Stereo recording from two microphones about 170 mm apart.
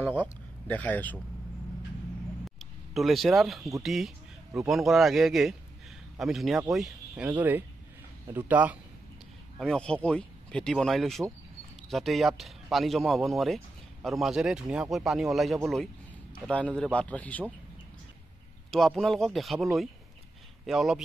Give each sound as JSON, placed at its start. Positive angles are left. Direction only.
{"t": 0.7, "sound": "a man's voice", "side_deg": 10}
{"t": 2.4, "sound": "a sound", "side_deg": 0}
{"t": 3.8, "sound": "speech", "side_deg": 0}
{"t": 9.6, "sound": "a man's voice", "side_deg": 5}
{"t": 18.7, "sound": "speech", "side_deg": 0}